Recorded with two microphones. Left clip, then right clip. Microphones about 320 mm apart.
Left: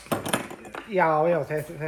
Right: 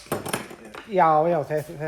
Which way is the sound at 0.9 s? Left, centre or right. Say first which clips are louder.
Right 3 dB; right.